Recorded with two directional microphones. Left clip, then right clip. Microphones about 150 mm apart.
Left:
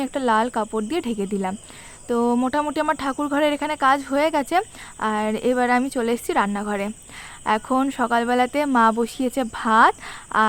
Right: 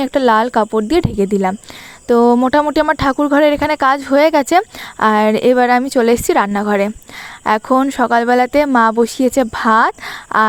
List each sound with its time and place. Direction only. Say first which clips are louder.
0.0 s speech: right 8 dB; 45° right (ahead or behind)